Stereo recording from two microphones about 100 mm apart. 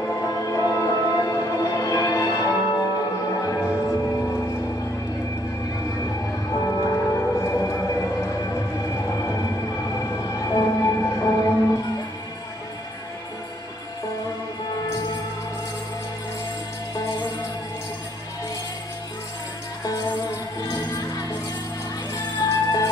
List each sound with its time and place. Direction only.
0.1 s music: 35° left (ahead or behind)
3.5 s music: 25° left (ahead or behind)
6.5 s train: 30° left (ahead or behind)
9.9 s music: 30° left (ahead or behind)
22.4 s music: 40° left (ahead or behind)